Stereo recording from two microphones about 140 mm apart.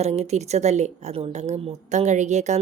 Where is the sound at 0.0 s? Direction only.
50° right (ahead or behind).